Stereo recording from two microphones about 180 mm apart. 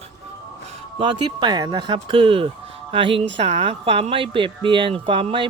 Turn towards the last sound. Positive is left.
turn(degrees=-30)  # may be behind; listen again after turning